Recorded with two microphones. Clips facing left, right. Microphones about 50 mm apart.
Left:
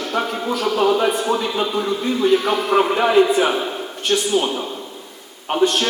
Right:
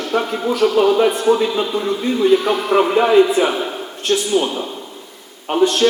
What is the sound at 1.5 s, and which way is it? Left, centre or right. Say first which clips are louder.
Speech: right 1 dB; centre.